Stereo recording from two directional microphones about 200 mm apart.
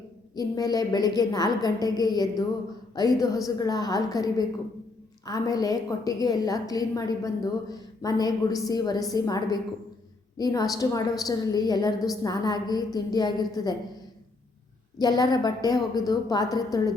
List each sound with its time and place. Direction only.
0.3 s a woman's voice: 20° left (ahead or behind)
14.9 s a woman's voice: 20° left (ahead or behind)